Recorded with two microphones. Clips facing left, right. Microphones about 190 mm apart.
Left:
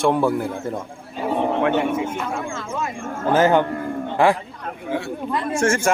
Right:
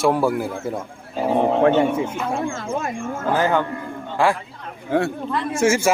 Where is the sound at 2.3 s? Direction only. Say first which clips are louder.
Right 3 dB; 35° right (ahead or behind).